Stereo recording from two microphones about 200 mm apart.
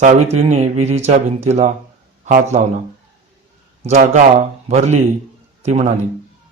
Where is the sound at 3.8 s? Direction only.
35° right (ahead or behind).